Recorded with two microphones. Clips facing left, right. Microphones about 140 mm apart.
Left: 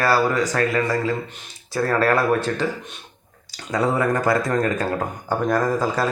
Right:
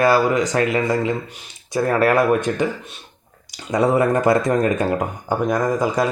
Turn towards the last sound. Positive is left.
turn(degrees=-15)  # may be behind; listen again after turning